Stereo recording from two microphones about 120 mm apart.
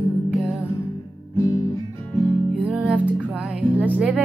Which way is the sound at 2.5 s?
5° right (ahead or behind).